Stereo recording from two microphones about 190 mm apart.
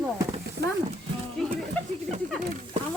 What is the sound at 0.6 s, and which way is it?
Music, 55° right (ahead or behind).